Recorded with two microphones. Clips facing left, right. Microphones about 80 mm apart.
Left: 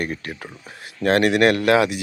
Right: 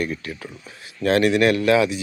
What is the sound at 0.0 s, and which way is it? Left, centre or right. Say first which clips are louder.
Speech: right 1 dB; left.